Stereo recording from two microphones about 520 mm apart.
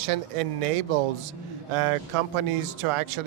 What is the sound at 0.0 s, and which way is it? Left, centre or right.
Speech, right.